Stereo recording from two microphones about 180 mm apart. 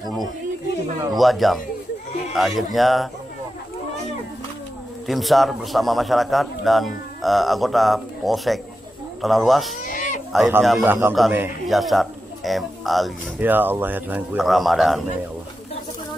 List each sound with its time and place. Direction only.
0.0 s a man's voice: centre (ahead or behind)
5.0 s a man's voice: centre (ahead or behind)
9.8 s cat: 45° left (ahead or behind)
10.6 s a man's voice: centre (ahead or behind)
10.9 s a man's voice: 10° right (ahead or behind)
13.4 s a man's voice: 10° right (ahead or behind)